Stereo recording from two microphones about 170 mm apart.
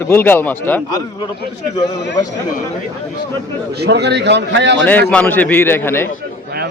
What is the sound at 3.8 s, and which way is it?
Speech, 80° right.